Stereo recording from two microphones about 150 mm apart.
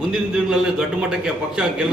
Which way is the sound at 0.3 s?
5° right (ahead or behind).